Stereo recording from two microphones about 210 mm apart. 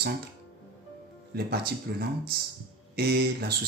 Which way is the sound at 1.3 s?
50° right (ahead or behind).